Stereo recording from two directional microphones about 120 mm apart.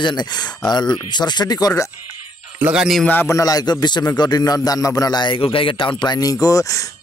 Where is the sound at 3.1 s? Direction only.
20° left (ahead or behind).